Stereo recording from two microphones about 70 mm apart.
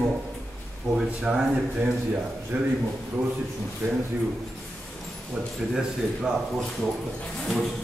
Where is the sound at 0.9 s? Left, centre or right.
Centre.